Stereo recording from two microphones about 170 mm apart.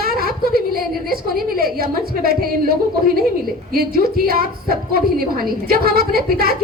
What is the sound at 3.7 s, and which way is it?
A woman's voice, 60° right (ahead or behind).